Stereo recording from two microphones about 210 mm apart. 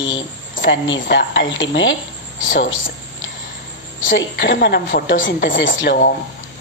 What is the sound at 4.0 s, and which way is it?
A woman's voice, 60° left (ahead or behind).